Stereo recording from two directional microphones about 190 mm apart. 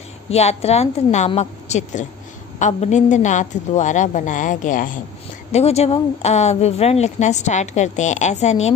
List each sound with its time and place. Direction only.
0.3 s a woman's voice: 35° left (ahead or behind)
5.5 s a woman's voice: 35° left (ahead or behind)